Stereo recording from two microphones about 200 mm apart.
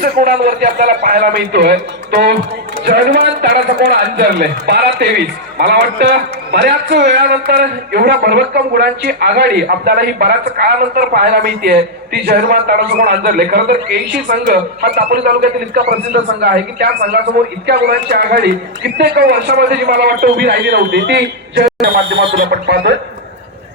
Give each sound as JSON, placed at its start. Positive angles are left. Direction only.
{"t": 0.0, "sound": "a man's voice", "side_deg": -50}